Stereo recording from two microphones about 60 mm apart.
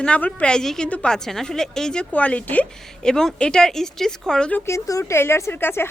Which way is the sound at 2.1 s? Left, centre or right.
Left.